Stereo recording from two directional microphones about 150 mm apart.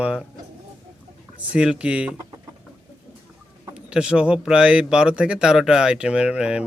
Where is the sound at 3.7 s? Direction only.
5° right (ahead or behind).